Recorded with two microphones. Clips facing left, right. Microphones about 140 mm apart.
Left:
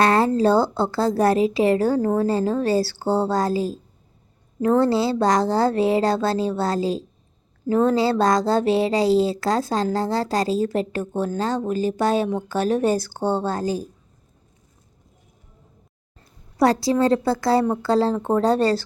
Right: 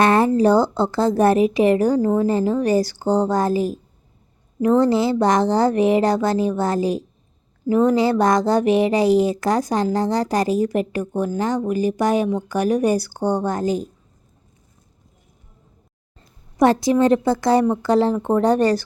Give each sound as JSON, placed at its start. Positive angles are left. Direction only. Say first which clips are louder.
{"t": 0.0, "sound": "a woman's voice", "louder": "right 2 dB", "side_deg": -20}
{"t": 16.6, "sound": "a woman's voice", "louder": "right 3 dB", "side_deg": -20}